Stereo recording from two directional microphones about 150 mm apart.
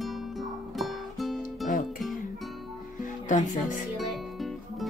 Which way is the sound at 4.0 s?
Centre (ahead or behind).